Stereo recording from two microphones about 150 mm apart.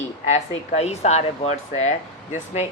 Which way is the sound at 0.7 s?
45° left (ahead or behind).